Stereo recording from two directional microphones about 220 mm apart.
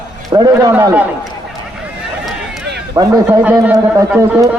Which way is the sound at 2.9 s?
15° right (ahead or behind).